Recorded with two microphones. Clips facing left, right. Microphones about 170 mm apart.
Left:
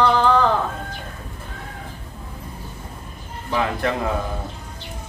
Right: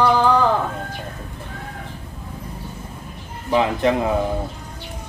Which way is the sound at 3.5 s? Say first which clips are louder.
Right 5 dB; 20° right (ahead or behind).